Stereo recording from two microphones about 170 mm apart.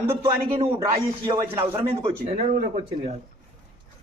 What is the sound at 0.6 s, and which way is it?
Speech, 35° right (ahead or behind).